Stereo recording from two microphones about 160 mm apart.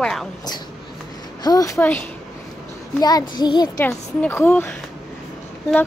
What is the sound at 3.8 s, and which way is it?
Speech, 15° left (ahead or behind).